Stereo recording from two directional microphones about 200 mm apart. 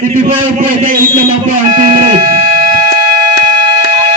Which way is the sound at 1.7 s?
45° right (ahead or behind).